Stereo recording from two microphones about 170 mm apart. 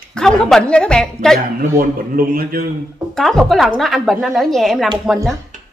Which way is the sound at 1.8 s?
60° right (ahead or behind).